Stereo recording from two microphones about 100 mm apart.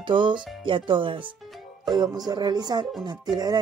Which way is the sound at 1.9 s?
45° right (ahead or behind).